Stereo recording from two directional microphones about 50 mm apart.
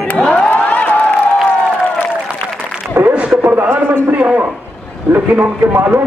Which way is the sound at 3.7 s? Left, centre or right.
Right.